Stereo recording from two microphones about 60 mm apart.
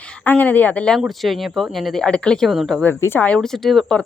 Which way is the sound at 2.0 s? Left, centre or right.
Centre.